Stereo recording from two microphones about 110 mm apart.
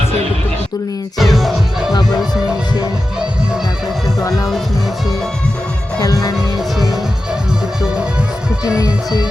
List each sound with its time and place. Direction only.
1.2 s music: centre (ahead or behind)
6.0 s music: 35° left (ahead or behind)
8.6 s music: 30° left (ahead or behind)